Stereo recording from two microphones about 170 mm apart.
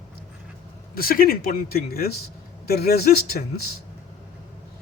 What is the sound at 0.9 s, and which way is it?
Speech, 60° left (ahead or behind).